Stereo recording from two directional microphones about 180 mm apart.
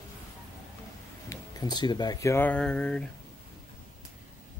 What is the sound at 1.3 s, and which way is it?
Speech, 20° left (ahead or behind).